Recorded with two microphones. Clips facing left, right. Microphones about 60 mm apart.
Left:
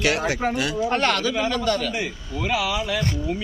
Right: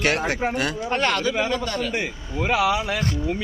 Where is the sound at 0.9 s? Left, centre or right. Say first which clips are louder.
Right 1 dB; centre.